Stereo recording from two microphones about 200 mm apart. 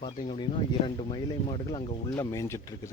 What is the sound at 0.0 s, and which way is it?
Speech, 30° left (ahead or behind).